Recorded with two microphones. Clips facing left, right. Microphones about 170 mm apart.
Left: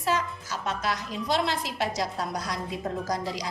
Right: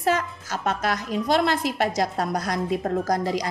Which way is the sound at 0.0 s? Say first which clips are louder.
Right 4 dB; 55° right (ahead or behind).